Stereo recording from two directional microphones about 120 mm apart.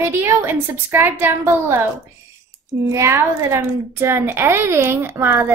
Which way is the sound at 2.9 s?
25° right (ahead or behind).